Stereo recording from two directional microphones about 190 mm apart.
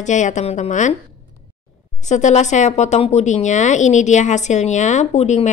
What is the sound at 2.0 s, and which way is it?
Speech, 40° left (ahead or behind).